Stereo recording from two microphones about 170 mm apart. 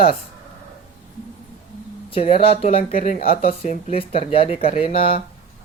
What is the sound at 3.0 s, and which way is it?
Speech, 55° left (ahead or behind).